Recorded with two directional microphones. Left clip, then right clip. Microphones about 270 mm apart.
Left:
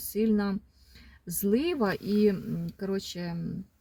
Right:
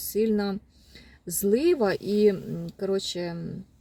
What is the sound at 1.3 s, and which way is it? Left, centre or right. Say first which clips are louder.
Speech: right 6 dB; centre.